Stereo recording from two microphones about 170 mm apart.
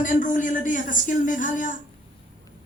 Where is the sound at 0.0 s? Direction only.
50° left (ahead or behind).